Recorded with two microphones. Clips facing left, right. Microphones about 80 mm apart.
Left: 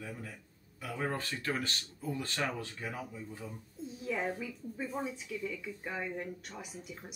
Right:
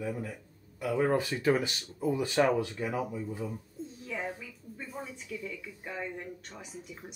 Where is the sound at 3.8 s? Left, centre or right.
Centre.